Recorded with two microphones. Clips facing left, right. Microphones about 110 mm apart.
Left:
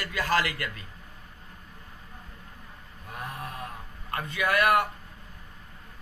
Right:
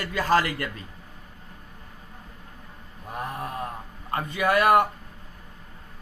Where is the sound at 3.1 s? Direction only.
30° right (ahead or behind).